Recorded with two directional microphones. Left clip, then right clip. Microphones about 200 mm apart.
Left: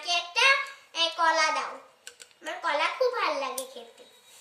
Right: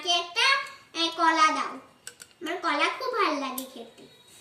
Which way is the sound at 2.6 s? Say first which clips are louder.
Left 1 dB; 10° left (ahead or behind).